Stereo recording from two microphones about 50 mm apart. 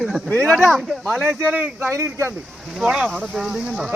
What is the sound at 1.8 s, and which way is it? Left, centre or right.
Speech, right.